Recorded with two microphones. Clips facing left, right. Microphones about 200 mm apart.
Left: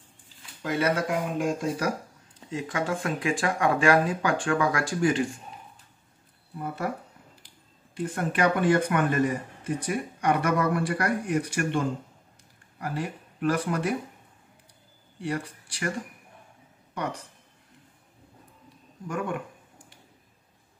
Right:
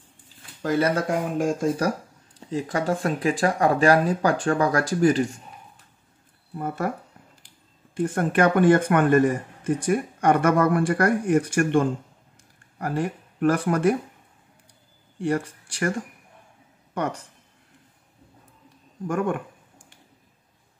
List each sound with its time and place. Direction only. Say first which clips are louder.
0.6 s speech: right 4 dB; 40° right (ahead or behind)
6.6 s speech: right 4 dB; 50° right (ahead or behind)
15.1 s speech: right 6 dB; 50° right (ahead or behind)
19.0 s speech: right 6 dB; 50° right (ahead or behind)